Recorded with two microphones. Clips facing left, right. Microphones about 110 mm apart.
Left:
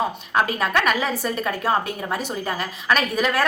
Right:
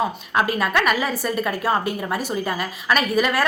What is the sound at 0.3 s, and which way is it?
A woman's voice, 5° right (ahead or behind).